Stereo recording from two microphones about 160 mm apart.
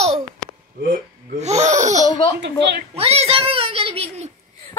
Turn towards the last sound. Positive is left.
turn(degrees=-40)  # may be behind; listen again after turning